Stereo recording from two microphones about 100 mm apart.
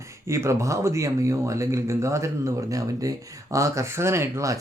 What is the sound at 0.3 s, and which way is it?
Speech, 30° right (ahead or behind).